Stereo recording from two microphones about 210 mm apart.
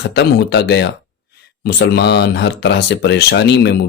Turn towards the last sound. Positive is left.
turn(degrees=50)  # may be behind; listen again after turning